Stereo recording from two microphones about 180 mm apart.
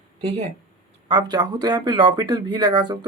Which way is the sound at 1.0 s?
25° right (ahead or behind).